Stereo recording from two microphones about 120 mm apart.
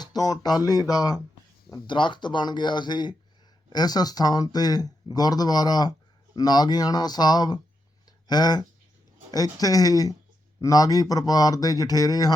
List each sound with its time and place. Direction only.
0.0 s speech: 35° left (ahead or behind)